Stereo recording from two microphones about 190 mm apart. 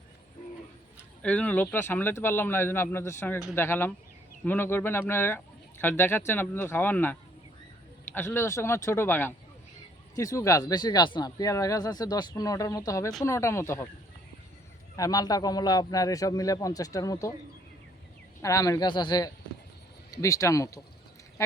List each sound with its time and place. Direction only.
1.2 s speech: 5° left (ahead or behind)
14.9 s speech: 20° left (ahead or behind)
18.4 s speech: 15° left (ahead or behind)